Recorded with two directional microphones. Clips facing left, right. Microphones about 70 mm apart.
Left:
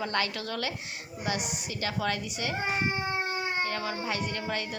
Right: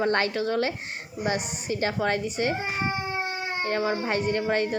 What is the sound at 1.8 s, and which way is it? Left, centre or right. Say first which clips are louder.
Speech: right 5 dB; right.